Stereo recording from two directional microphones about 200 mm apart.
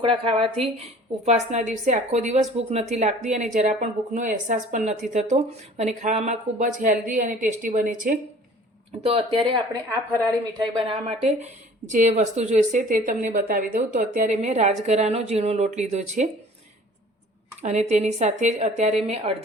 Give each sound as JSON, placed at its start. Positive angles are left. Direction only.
{"t": 0.0, "sound": "speech", "side_deg": -25}
{"t": 9.0, "sound": "speech", "side_deg": -30}
{"t": 11.9, "sound": "speech", "side_deg": -40}
{"t": 17.6, "sound": "speech", "side_deg": -35}